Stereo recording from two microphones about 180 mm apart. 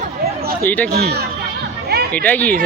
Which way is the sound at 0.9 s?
60° right (ahead or behind).